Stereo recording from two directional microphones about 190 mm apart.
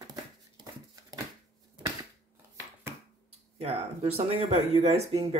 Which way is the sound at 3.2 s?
30° right (ahead or behind).